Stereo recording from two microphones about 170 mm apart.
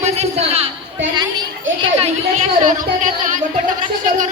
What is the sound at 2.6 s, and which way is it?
Music, 50° right (ahead or behind).